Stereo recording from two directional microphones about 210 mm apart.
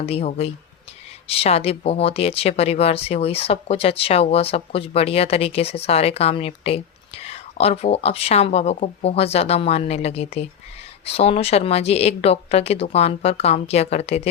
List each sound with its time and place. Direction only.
0.0 s speech: 30° left (ahead or behind)